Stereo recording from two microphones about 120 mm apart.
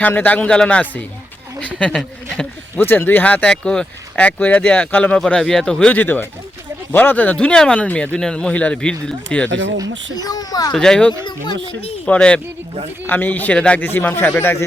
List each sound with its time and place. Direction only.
0.0 s speech: 15° left (ahead or behind)
2.3 s speech: 15° left (ahead or behind)
10.2 s speech: 30° left (ahead or behind)
10.7 s speech: 5° left (ahead or behind)
11.2 s speech: 40° left (ahead or behind)
12.0 s speech: 10° left (ahead or behind)